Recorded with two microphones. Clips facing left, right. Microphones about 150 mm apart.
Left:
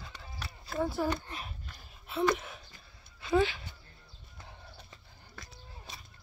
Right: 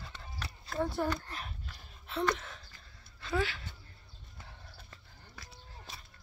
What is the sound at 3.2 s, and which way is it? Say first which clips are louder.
Speech: left 6 dB; 20° left (ahead or behind).